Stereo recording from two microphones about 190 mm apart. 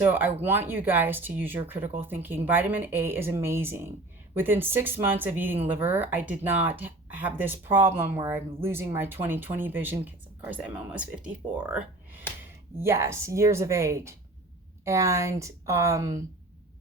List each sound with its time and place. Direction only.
0.0 s speech: 10° right (ahead or behind)